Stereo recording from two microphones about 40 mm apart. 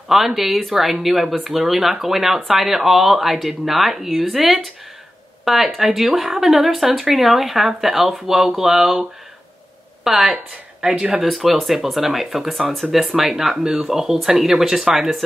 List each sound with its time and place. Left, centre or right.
0.1 s speech: centre
10.0 s speech: centre
10.9 s speech: centre
11.2 s speech: centre